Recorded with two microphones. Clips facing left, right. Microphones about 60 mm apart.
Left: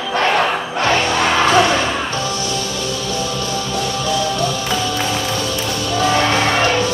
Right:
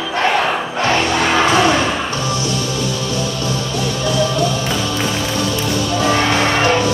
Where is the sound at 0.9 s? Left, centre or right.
Centre.